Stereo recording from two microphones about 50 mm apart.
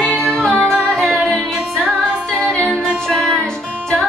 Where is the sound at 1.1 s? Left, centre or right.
Centre.